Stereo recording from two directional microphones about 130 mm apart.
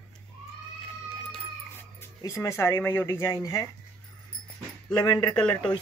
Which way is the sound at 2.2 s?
25° left (ahead or behind).